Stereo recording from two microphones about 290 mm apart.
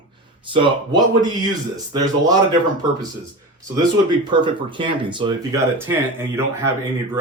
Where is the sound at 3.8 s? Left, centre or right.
Centre.